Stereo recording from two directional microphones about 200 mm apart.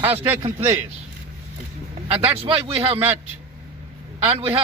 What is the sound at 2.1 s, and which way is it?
Speech, 25° right (ahead or behind).